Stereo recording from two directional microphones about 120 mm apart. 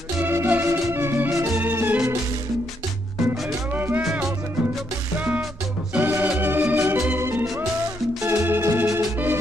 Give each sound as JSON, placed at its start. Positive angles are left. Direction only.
{"t": 0.2, "sound": "music", "side_deg": -20}
{"t": 3.7, "sound": "music", "side_deg": -15}
{"t": 5.9, "sound": "music", "side_deg": -15}